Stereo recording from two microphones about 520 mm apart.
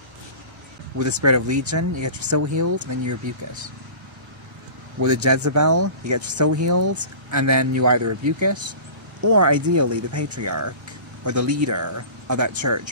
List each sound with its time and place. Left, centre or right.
0.9 s speech: right
5.0 s speech: right